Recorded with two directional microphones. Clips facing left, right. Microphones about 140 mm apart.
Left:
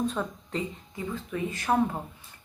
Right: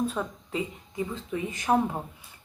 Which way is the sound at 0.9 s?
20° right (ahead or behind).